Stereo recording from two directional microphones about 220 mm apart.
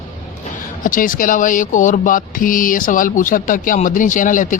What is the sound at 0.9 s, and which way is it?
Speech, 40° left (ahead or behind).